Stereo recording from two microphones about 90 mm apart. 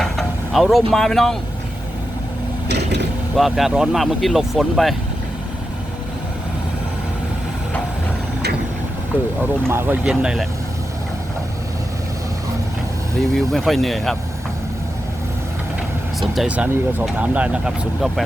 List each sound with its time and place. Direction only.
0.0 s speech: centre (ahead or behind)
3.3 s speech: centre (ahead or behind)
9.6 s speech: 25° right (ahead or behind)
10.1 s speech: 10° right (ahead or behind)
13.1 s speech: 5° left (ahead or behind)
16.5 s speech: 15° right (ahead or behind)